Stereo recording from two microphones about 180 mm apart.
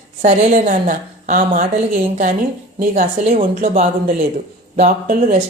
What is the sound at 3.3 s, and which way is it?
Speech, 35° right (ahead or behind).